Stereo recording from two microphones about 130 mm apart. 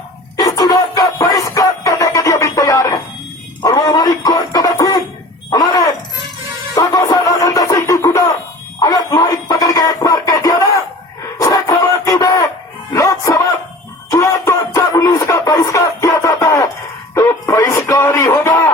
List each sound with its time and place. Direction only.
0.3 s music: 30° left (ahead or behind)
5.5 s a sound: 30° left (ahead or behind)
6.7 s music: 25° left (ahead or behind)